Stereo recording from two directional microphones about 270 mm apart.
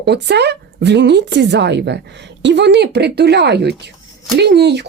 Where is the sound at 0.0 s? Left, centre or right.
Right.